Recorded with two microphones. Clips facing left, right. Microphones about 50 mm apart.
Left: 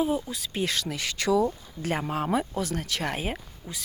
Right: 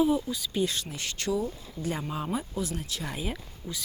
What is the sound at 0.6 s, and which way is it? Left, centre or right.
Speech, left.